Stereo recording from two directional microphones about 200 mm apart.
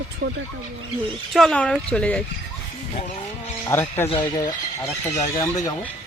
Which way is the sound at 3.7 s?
15° left (ahead or behind).